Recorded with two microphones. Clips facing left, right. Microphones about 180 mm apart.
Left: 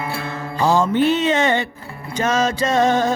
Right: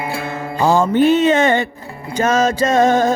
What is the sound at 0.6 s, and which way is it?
Music, 50° right (ahead or behind).